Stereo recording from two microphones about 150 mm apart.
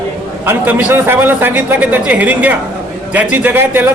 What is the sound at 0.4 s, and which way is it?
A man's voice, 10° right (ahead or behind).